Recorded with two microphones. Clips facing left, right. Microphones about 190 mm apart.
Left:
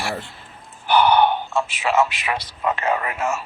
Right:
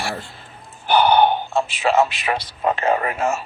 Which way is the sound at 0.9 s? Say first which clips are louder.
Right 1 dB; 30° right (ahead or behind).